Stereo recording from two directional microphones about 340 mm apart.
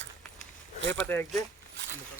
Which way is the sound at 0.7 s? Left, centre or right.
Right.